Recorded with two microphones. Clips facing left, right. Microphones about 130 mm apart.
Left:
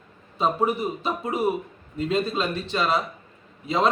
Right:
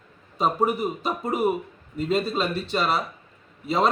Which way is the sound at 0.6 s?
40° right (ahead or behind).